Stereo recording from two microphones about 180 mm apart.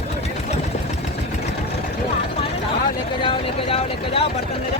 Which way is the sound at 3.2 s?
30° left (ahead or behind).